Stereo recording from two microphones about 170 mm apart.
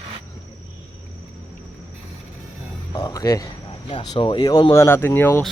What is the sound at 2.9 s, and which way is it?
Speech, 20° left (ahead or behind).